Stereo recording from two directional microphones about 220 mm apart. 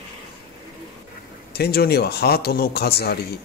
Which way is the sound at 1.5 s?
45° left (ahead or behind).